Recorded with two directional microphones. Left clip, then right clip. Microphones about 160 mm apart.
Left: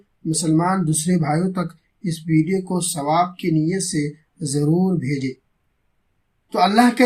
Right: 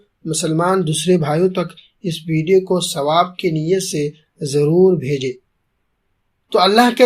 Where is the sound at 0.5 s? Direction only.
25° right (ahead or behind).